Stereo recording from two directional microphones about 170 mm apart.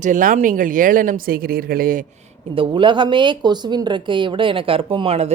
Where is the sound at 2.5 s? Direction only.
30° right (ahead or behind).